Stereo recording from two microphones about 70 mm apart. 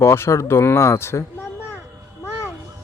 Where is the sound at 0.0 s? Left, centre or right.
Left.